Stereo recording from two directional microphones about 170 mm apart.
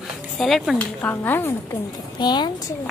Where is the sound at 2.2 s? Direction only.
25° left (ahead or behind).